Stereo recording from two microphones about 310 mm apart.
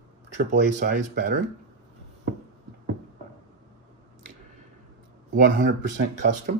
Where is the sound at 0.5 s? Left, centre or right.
Right.